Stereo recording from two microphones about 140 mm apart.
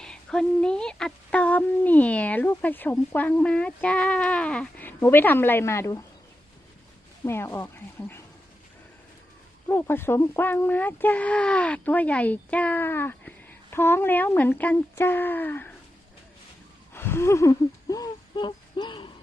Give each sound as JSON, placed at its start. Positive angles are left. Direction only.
{"t": 0.0, "sound": "speech", "side_deg": 5}
{"t": 7.3, "sound": "speech", "side_deg": 20}
{"t": 9.6, "sound": "speech", "side_deg": 15}
{"t": 16.9, "sound": "a sound", "side_deg": 15}